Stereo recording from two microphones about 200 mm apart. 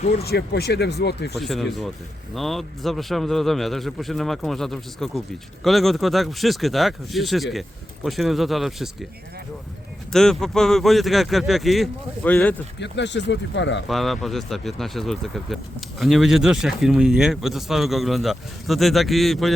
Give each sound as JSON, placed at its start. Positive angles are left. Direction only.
{"t": 0.0, "sound": "speech", "side_deg": 30}
{"t": 0.3, "sound": "speech", "side_deg": 55}
{"t": 1.4, "sound": "speech", "side_deg": 0}
{"t": 10.1, "sound": "speech", "side_deg": 0}
{"t": 12.8, "sound": "speech", "side_deg": 60}
{"t": 13.8, "sound": "speech", "side_deg": 0}